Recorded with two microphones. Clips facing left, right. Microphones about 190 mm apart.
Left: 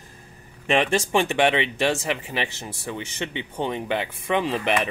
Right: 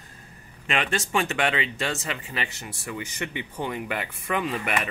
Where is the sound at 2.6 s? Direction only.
25° left (ahead or behind).